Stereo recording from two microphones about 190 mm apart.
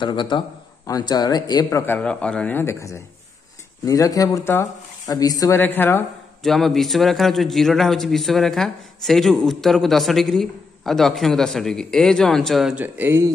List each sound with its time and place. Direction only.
0.0 s a man's voice: 25° left (ahead or behind); by 13.3 s 10° right (ahead or behind)